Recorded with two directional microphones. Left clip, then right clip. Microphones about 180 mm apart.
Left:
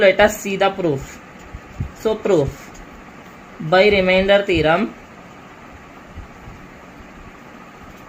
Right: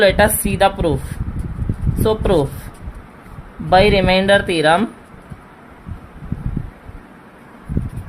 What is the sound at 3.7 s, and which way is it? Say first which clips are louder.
Speech: right 1 dB; 90° right.